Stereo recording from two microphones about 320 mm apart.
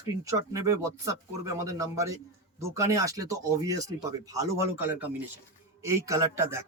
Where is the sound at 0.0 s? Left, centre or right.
Centre.